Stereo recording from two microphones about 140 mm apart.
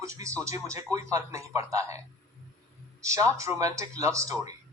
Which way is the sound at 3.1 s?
20° right (ahead or behind).